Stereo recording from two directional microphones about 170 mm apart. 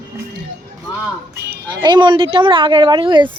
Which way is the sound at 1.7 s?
25° right (ahead or behind).